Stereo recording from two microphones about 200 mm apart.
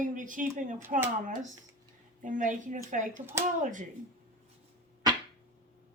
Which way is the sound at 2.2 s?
40° right (ahead or behind).